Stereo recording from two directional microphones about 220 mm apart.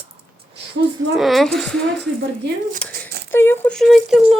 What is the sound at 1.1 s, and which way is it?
Speech, centre (ahead or behind).